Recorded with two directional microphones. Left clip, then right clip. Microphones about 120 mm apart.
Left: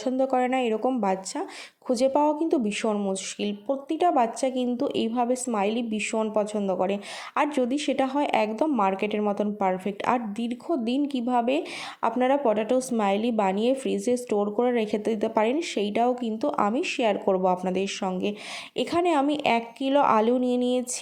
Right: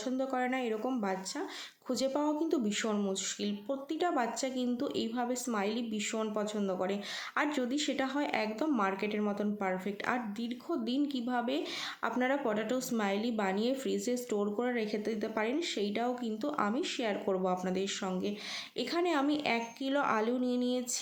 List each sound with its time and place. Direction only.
0.0 s speech: 55° left (ahead or behind)
1.9 s speech: 50° left (ahead or behind)
12.1 s speech: 45° left (ahead or behind); by 20.8 s 60° left (ahead or behind)